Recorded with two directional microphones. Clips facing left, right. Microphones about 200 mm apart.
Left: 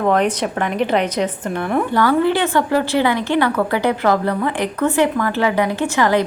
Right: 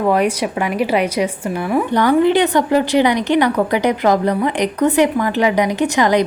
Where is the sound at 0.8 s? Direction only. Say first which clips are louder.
Right 1 dB; 10° right (ahead or behind).